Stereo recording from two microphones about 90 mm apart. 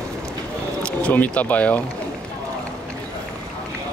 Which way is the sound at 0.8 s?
15° left (ahead or behind).